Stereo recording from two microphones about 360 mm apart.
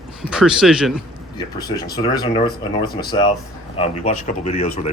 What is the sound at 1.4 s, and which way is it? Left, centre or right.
Speech, centre.